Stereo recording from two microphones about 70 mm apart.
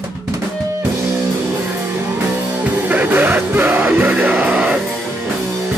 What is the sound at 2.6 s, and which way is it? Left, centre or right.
Music, right.